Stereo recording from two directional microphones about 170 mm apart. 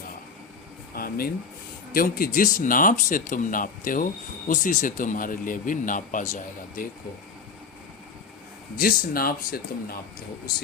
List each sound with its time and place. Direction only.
0.9 s speech: 60° left (ahead or behind)
8.8 s speech: 60° left (ahead or behind)